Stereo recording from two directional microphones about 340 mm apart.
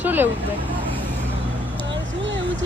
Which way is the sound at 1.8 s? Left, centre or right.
Right.